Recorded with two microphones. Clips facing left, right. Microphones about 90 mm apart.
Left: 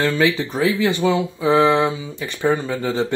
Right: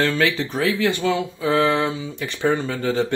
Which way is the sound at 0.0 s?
15° left (ahead or behind).